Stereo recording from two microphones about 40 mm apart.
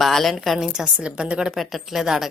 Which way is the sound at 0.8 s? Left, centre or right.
Right.